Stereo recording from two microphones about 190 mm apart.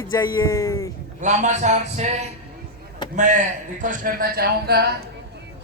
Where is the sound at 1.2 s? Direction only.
40° right (ahead or behind).